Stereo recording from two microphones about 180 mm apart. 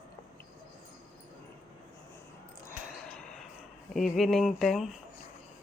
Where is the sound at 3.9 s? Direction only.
Centre (ahead or behind).